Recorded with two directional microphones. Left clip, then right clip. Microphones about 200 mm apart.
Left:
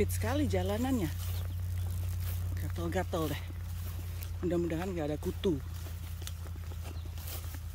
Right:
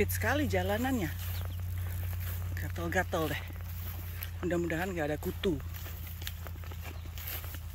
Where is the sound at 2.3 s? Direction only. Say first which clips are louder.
Right 4 dB; 5° left (ahead or behind).